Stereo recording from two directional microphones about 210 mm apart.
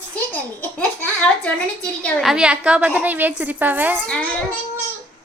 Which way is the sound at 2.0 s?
Centre (ahead or behind).